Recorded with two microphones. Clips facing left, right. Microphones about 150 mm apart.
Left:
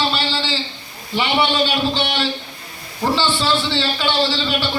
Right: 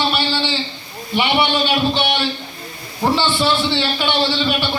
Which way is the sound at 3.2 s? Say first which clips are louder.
Right 1 dB; 15° right (ahead or behind).